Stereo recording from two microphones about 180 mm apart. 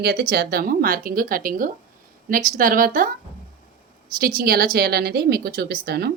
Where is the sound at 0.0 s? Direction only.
60° right (ahead or behind).